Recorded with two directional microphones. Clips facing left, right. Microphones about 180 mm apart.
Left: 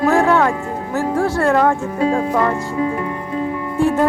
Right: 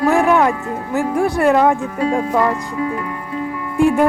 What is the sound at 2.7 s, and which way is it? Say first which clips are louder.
Speech: left 2 dB; 25° left (ahead or behind).